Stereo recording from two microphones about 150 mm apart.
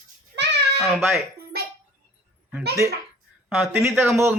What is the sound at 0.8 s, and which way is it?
Speech, centre (ahead or behind).